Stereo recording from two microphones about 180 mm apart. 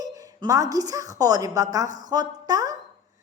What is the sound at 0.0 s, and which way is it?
Speech, 20° right (ahead or behind).